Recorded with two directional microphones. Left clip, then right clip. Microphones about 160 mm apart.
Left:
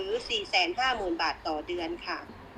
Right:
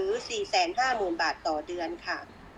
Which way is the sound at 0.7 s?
20° right (ahead or behind).